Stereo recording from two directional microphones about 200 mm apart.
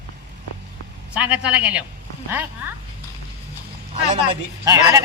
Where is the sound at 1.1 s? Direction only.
5° right (ahead or behind).